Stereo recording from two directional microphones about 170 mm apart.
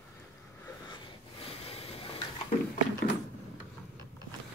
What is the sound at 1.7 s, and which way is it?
Tick-tock, 30° left (ahead or behind).